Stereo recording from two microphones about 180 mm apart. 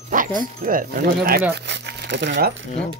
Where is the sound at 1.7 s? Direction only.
70° right (ahead or behind).